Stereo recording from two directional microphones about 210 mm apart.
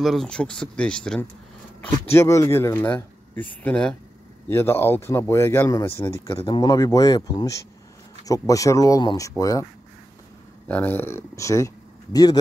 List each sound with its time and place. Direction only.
0.0 s speech: centre (ahead or behind)
2.1 s speech: 15° left (ahead or behind)
10.7 s speech: 10° left (ahead or behind)